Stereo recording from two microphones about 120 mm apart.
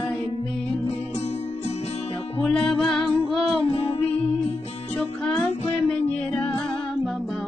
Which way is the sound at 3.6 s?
45° left (ahead or behind).